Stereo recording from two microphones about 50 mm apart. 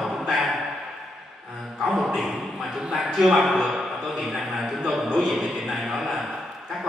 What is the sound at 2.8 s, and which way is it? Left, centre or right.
Speech, centre.